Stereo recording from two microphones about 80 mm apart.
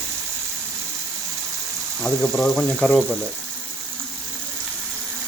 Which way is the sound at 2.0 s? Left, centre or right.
Centre.